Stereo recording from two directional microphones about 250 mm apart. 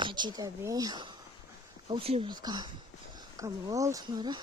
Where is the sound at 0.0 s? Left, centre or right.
Centre.